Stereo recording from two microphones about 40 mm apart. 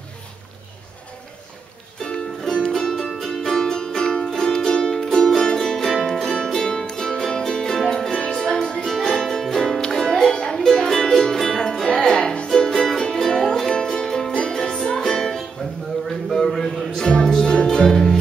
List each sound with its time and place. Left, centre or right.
2.0 s music: centre
16.3 s a sound: centre
17.2 s music: centre